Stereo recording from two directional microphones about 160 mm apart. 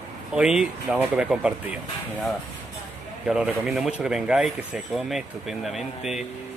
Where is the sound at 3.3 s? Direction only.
5° right (ahead or behind).